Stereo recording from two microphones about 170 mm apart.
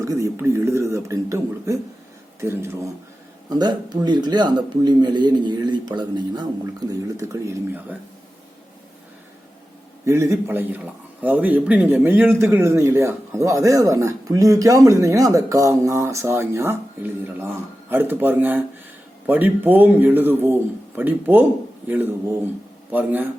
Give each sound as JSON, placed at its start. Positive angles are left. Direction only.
{"t": 0.0, "sound": "a man's voice", "side_deg": -20}
{"t": 3.5, "sound": "speech", "side_deg": -25}
{"t": 10.1, "sound": "a man's voice", "side_deg": -15}